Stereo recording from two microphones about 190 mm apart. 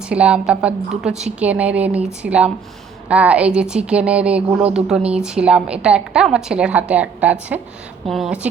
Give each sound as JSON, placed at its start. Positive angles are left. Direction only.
{"t": 0.1, "sound": "a woman's voice", "side_deg": -5}